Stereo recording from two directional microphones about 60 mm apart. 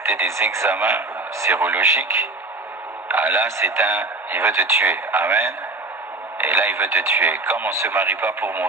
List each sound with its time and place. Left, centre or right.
0.0 s a man's voice: right